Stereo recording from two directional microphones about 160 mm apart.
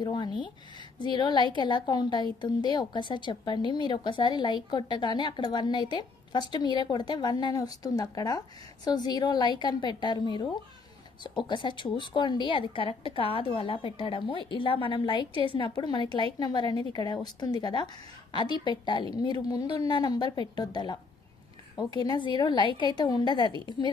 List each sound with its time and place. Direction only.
0.0 s a woman's voice: 30° left (ahead or behind)